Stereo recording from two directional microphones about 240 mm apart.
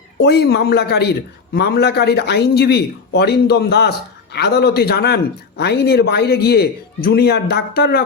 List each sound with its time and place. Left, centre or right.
0.2 s a man's voice: left